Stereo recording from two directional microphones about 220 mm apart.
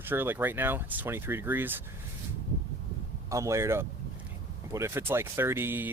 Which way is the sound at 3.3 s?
15° right (ahead or behind).